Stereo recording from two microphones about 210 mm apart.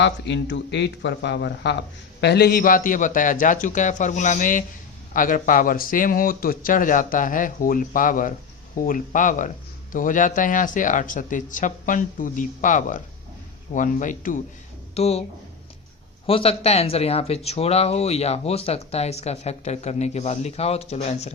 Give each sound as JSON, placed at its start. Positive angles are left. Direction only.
{"t": 0.0, "sound": "speech", "side_deg": 55}
{"t": 16.2, "sound": "speech", "side_deg": 25}